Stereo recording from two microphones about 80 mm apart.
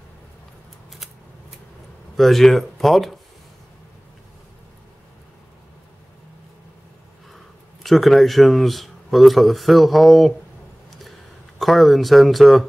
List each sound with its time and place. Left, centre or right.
2.1 s speech: centre
7.8 s speech: centre
10.9 s a sound: centre